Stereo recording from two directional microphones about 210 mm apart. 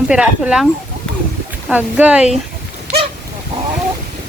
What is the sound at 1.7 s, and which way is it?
Speech, 5° right (ahead or behind).